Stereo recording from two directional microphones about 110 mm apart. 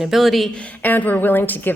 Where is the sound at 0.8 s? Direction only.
15° left (ahead or behind).